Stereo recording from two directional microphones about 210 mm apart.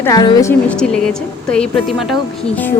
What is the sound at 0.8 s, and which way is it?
Speech, 5° left (ahead or behind).